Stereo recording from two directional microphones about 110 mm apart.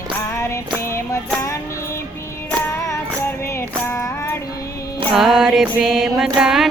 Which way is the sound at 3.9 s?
25° left (ahead or behind).